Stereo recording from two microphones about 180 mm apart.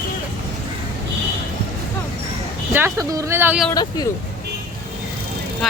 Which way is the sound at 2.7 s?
10° right (ahead or behind).